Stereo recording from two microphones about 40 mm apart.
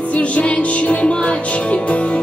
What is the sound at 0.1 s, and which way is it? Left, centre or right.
Music, left.